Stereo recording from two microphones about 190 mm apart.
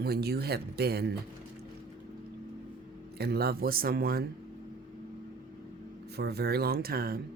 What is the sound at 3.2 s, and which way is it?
Speech, 55° right (ahead or behind).